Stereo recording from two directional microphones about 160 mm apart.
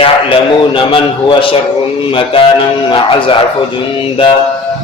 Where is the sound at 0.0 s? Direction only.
35° left (ahead or behind).